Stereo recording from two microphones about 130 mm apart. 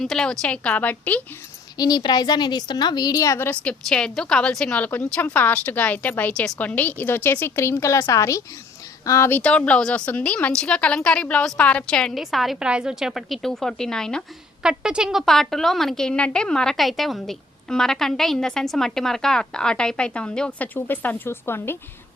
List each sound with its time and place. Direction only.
0.0 s a woman's voice: 5° left (ahead or behind)
1.8 s a woman's voice: 30° left (ahead or behind)
9.4 s a woman's voice: 10° left (ahead or behind)
14.6 s a woman's voice: 5° right (ahead or behind); by 21.8 s 20° left (ahead or behind)